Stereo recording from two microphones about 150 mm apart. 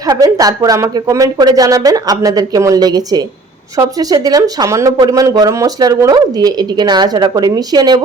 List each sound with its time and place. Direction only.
0.1 s speech: 25° right (ahead or behind)